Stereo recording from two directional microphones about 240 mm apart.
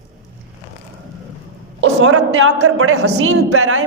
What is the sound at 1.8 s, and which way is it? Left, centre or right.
A man's voice, right.